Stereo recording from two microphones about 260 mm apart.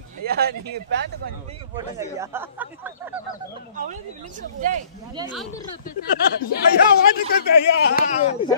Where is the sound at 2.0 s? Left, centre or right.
Centre.